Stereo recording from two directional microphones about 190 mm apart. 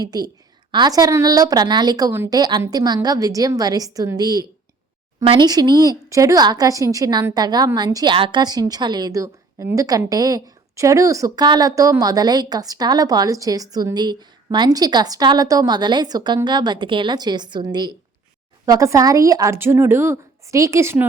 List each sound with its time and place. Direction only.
0.0 s a woman's voice: 20° right (ahead or behind)